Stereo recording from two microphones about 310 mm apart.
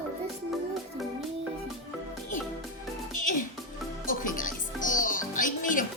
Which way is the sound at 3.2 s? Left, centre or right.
Left.